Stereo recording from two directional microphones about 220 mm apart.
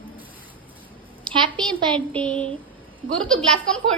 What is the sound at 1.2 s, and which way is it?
Speech, 25° right (ahead or behind).